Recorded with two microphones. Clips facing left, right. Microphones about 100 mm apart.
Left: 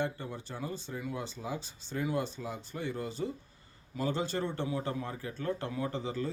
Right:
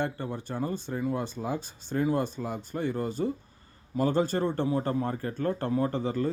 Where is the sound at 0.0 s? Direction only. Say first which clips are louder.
Right 4 dB; 55° right (ahead or behind).